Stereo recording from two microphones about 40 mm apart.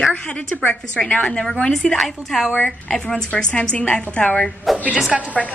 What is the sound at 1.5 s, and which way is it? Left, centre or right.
Speech, centre.